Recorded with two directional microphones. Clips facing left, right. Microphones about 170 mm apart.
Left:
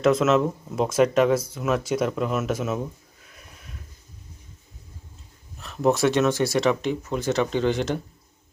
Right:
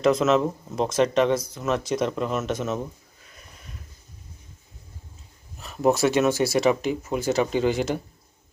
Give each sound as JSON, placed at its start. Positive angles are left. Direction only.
{"t": 0.0, "sound": "speech", "side_deg": 5}
{"t": 3.2, "sound": "a sound", "side_deg": 0}
{"t": 5.5, "sound": "speech", "side_deg": -5}